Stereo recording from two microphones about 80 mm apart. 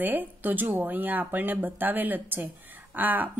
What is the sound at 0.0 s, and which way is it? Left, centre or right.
Speech, right.